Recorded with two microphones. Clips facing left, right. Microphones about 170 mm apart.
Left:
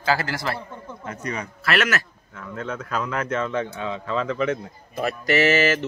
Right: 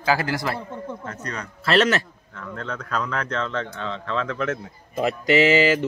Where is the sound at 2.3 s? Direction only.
5° left (ahead or behind).